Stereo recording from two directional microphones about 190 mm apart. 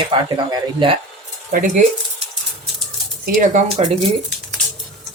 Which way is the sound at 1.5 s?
45° right (ahead or behind).